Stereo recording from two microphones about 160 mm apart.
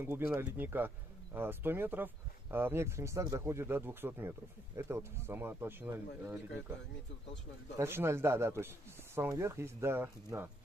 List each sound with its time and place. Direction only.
0.0 s speech: 10° right (ahead or behind)
7.7 s speech: 15° right (ahead or behind)